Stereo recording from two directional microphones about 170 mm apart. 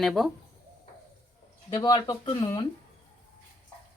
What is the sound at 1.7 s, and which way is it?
Speech, 25° left (ahead or behind).